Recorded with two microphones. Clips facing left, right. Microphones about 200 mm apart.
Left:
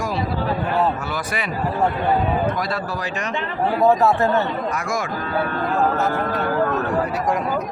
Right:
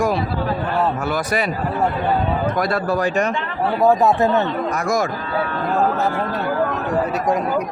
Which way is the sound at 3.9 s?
15° right (ahead or behind).